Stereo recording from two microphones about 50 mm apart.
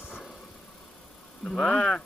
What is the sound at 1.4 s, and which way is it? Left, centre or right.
Speech, centre.